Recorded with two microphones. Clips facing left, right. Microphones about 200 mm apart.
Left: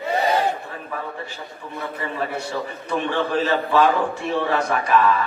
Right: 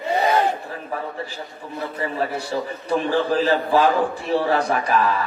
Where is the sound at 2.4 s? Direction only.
35° right (ahead or behind).